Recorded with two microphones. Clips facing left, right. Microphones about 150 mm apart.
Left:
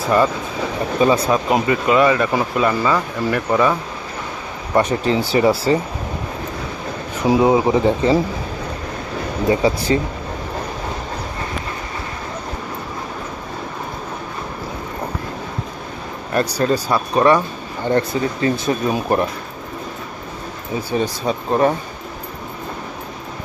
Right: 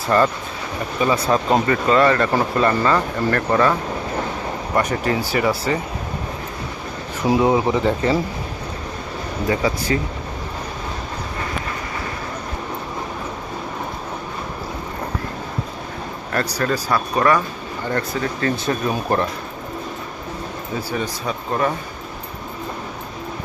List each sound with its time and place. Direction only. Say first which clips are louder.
0.9 s speech: left 4 dB; 20° left (ahead or behind)
1.3 s speech: left 1 dB; 10° left (ahead or behind)
4.8 s speech: left 4 dB; 25° left (ahead or behind)
7.3 s speech: left 2 dB; 20° left (ahead or behind)
9.5 s speech: left 4 dB; 25° left (ahead or behind)
16.3 s speech: left 4 dB; 20° left (ahead or behind)
20.9 s speech: left 7 dB; 25° left (ahead or behind)